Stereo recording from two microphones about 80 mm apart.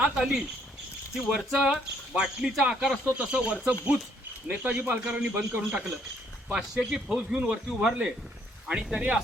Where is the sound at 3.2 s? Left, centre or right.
Centre.